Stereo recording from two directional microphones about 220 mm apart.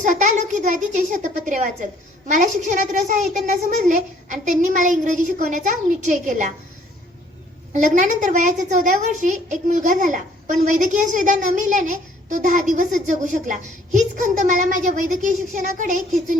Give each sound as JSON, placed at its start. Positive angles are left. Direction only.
{"t": 0.0, "sound": "a woman's voice", "side_deg": -35}
{"t": 7.7, "sound": "a woman's voice", "side_deg": -35}